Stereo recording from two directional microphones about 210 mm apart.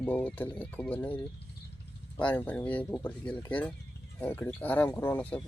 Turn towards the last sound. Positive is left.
turn(degrees=5)  # may be behind; listen again after turning